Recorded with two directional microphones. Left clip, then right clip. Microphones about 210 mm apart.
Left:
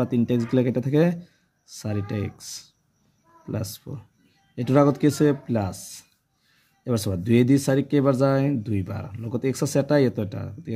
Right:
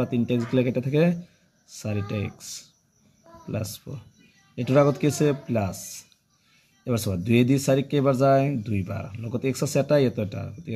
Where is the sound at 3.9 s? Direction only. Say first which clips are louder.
Left 1 dB; 35° left (ahead or behind).